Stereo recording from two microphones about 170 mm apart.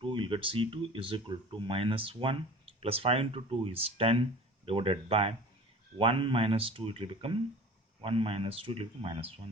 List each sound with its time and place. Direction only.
0.0 s speech: 30° right (ahead or behind)